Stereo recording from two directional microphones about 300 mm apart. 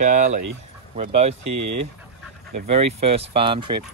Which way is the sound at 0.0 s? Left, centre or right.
Right.